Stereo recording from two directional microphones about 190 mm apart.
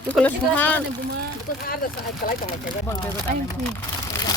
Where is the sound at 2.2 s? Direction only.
50° left (ahead or behind).